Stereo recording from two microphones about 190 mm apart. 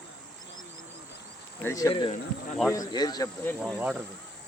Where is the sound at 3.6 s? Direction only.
10° right (ahead or behind).